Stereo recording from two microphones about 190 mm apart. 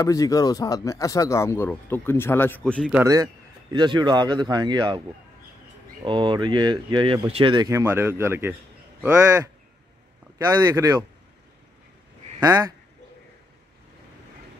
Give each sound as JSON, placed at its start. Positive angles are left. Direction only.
{"t": 0.0, "sound": "speech", "side_deg": 20}
{"t": 3.0, "sound": "speech", "side_deg": -20}
{"t": 6.0, "sound": "speech", "side_deg": -25}
{"t": 12.4, "sound": "speech", "side_deg": -20}